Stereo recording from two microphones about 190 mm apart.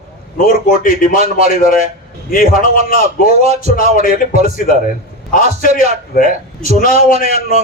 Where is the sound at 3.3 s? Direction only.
35° right (ahead or behind).